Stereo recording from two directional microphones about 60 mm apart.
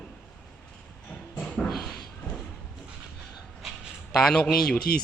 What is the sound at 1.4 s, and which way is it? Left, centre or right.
Dog, centre.